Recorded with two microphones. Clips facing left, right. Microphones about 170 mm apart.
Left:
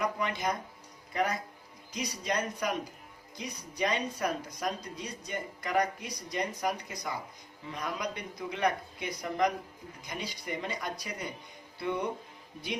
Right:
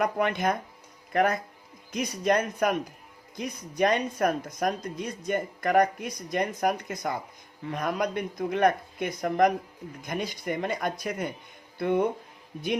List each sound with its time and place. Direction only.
0.0 s speech: 55° right (ahead or behind)